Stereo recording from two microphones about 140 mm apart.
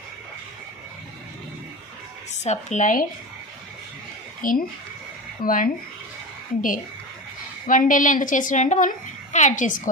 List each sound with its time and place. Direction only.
2.4 s speech: 55° left (ahead or behind); by 3.1 s 70° left (ahead or behind)
4.4 s a child's voice: 75° left (ahead or behind)
7.7 s a woman's voice: 70° left (ahead or behind)